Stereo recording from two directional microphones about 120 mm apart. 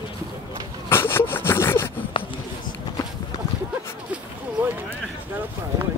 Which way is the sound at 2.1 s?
45° left (ahead or behind).